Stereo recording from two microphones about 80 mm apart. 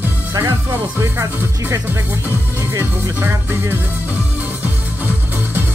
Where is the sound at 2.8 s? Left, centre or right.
Right.